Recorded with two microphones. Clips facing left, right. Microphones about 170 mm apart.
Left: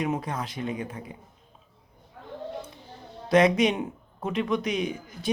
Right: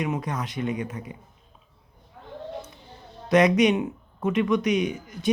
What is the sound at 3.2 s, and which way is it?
Speech, 30° left (ahead or behind).